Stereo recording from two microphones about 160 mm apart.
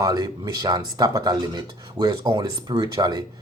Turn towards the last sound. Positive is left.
turn(degrees=-25)  # may be behind; listen again after turning